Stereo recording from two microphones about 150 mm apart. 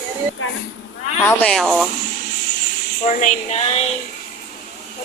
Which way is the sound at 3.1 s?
55° left (ahead or behind).